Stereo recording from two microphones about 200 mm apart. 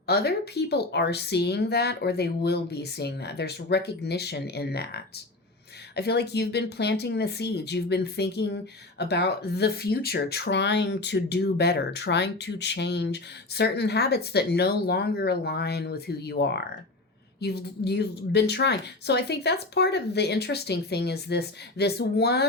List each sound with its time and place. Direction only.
0.1 s speech: 55° left (ahead or behind)